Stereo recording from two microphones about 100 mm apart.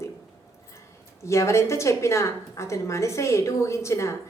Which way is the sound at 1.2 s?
30° left (ahead or behind).